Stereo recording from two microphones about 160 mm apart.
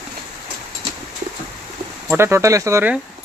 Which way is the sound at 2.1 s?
15° right (ahead or behind).